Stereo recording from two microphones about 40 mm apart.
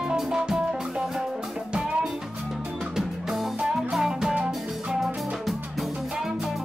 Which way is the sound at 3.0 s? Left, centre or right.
Centre.